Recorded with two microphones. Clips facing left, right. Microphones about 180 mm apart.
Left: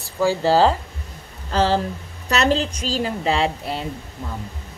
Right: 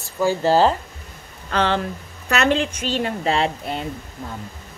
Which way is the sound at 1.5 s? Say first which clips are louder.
Left 2 dB; 35° left (ahead or behind).